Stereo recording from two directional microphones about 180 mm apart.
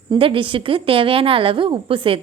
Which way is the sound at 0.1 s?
30° right (ahead or behind).